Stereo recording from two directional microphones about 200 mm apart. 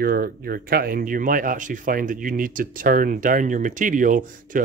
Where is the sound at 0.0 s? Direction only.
50° right (ahead or behind).